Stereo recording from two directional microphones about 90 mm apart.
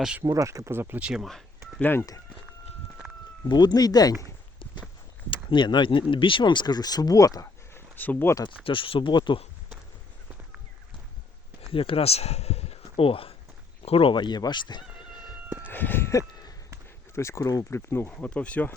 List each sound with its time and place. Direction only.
0.2 s speech: 35° right (ahead or behind)
1.0 s speech: 5° right (ahead or behind)
1.8 s speech: 25° left (ahead or behind)
3.5 s speech: 50° left (ahead or behind)
5.3 s speech: 65° left (ahead or behind); by 7.5 s 40° left (ahead or behind)
7.7 s a sound: 20° left (ahead or behind)
8.4 s speech: 70° left (ahead or behind)
11.7 s speech: 90° left
14.2 s cat: 50° left (ahead or behind)
15.6 s a sound: 20° left (ahead or behind); by 16.6 s 45° left (ahead or behind)
17.2 s speech: 35° left (ahead or behind)
17.7 s speech: 30° left (ahead or behind)
18.1 s speech: 15° left (ahead or behind)